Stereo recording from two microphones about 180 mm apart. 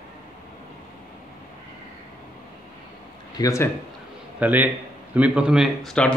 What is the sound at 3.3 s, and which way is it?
Speech, 15° left (ahead or behind).